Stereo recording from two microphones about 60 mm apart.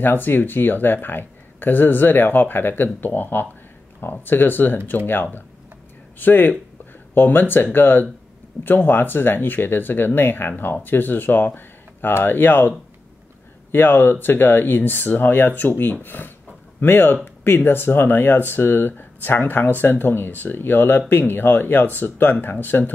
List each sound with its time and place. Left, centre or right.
0.0 s speech: left